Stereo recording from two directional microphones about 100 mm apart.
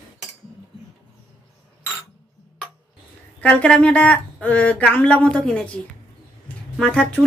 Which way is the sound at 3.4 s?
10° left (ahead or behind).